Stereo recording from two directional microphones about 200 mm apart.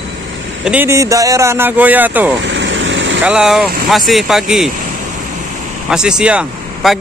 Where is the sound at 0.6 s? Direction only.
10° right (ahead or behind).